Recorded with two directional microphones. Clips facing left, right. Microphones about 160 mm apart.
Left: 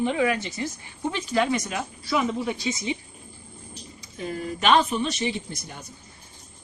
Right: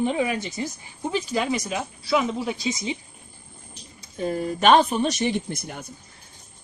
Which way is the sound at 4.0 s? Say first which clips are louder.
Right 6 dB; 45° right (ahead or behind).